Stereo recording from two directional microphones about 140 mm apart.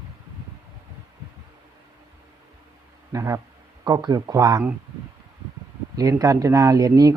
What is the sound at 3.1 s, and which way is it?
Speech, 20° right (ahead or behind).